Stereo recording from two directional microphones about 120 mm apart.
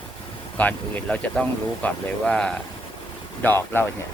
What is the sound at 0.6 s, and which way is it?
Speech, 10° left (ahead or behind).